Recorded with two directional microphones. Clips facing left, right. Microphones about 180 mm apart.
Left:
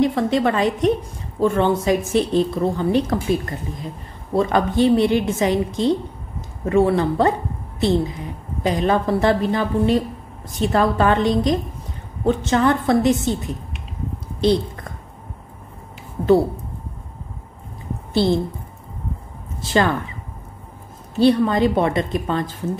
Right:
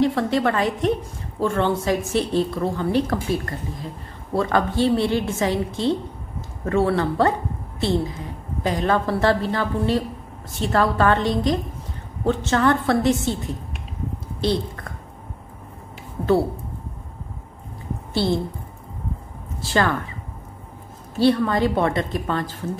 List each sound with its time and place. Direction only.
0.0 s a woman's voice: 15° left (ahead or behind)
8.6 s a woman's voice: 15° left (ahead or behind)
18.1 s a woman's voice: 20° left (ahead or behind)
19.6 s a woman's voice: 20° left (ahead or behind)
21.2 s a woman's voice: 20° left (ahead or behind)